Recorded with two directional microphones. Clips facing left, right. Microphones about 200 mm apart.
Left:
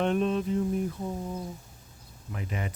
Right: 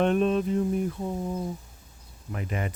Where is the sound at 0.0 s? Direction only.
55° right (ahead or behind).